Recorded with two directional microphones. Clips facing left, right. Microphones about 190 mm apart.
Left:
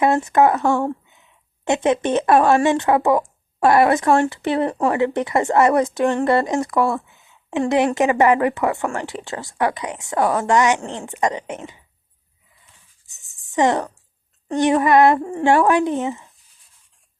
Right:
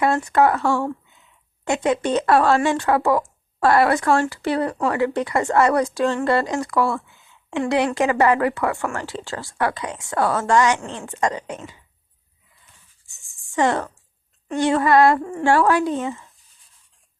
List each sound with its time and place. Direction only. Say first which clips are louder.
0.0 s speech: left 2 dB; 20° left (ahead or behind)
13.1 s writing: even; 20° left (ahead or behind)
14.5 s speech: left 2 dB; 20° left (ahead or behind)